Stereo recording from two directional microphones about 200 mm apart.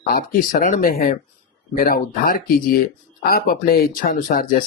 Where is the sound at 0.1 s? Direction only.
45° left (ahead or behind).